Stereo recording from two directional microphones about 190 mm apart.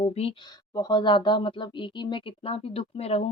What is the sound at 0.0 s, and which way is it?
Speech, 30° left (ahead or behind).